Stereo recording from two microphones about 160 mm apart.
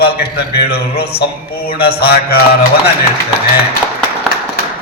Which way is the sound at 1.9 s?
80° left.